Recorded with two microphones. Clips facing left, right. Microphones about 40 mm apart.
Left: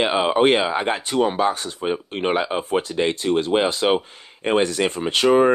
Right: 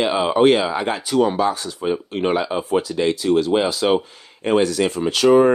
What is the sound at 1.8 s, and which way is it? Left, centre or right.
Speech, left.